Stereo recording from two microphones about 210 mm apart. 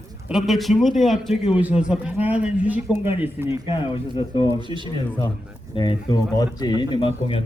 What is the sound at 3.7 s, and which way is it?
Speech, 25° left (ahead or behind).